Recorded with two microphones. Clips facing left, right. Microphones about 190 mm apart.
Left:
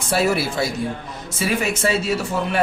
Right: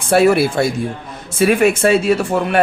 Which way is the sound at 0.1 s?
55° right (ahead or behind).